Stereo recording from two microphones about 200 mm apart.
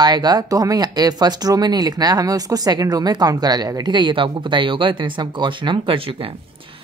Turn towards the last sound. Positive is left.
turn(degrees=-30)  # may be behind; listen again after turning